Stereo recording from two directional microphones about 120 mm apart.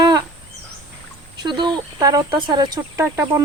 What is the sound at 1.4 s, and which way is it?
Speech, 40° right (ahead or behind).